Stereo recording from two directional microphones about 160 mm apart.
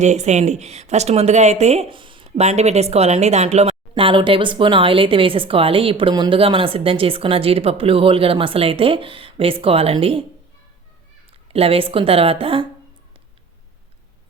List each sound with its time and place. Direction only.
0.0 s a woman's voice: 45° right (ahead or behind)
2.3 s speech: 45° right (ahead or behind)
11.5 s speech: 35° right (ahead or behind)